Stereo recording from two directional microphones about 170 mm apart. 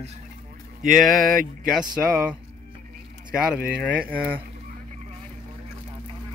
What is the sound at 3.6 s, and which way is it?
Speech, 60° right (ahead or behind).